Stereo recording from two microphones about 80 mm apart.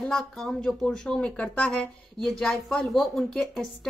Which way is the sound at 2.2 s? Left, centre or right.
Centre.